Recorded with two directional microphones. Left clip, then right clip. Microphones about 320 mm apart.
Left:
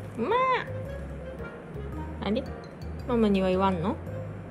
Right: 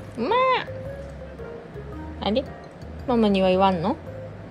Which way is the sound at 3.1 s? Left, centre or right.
Centre.